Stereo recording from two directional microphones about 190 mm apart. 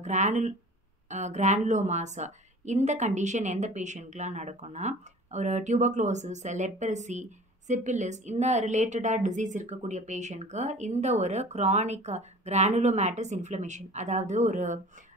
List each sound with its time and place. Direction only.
0.0 s a woman's voice: 40° right (ahead or behind)